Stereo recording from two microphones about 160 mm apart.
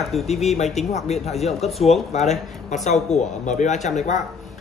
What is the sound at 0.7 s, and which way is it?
Speech, 45° left (ahead or behind).